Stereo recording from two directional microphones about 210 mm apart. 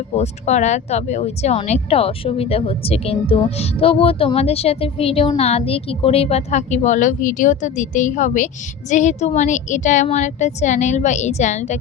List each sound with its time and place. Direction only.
0.1 s speech: 30° left (ahead or behind)